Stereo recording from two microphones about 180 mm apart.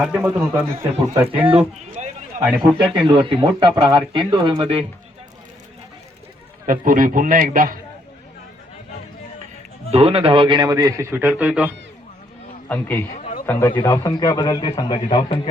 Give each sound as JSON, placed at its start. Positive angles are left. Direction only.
{"t": 0.0, "sound": "a man's voice", "side_deg": -5}
{"t": 1.5, "sound": "a man's voice", "side_deg": -35}
{"t": 2.4, "sound": "a man's voice", "side_deg": -5}
{"t": 2.9, "sound": "a man's voice", "side_deg": -25}
{"t": 6.7, "sound": "a man's voice", "side_deg": -50}
{"t": 9.9, "sound": "a man's voice", "side_deg": -35}
{"t": 12.6, "sound": "a man's voice", "side_deg": 10}
{"t": 13.1, "sound": "a sound", "side_deg": 40}
{"t": 13.4, "sound": "a man's voice", "side_deg": 15}